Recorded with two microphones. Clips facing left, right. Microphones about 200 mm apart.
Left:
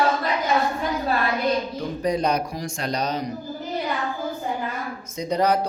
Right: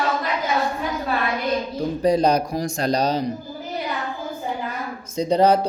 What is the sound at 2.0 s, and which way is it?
Speech, 35° right (ahead or behind).